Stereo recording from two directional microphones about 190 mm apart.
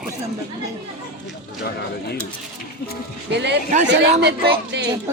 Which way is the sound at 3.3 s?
65° right (ahead or behind).